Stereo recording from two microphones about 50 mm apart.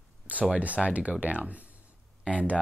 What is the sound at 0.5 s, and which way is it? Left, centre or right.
Speech, right.